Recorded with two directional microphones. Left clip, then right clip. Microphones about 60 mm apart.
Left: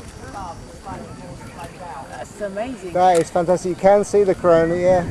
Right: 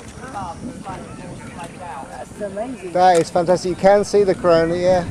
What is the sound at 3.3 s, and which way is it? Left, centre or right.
Speech, right.